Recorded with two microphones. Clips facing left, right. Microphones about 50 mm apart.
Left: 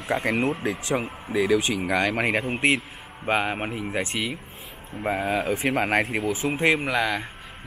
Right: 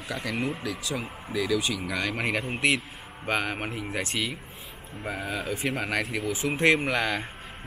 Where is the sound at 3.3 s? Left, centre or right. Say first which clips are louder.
Left 4 dB; centre.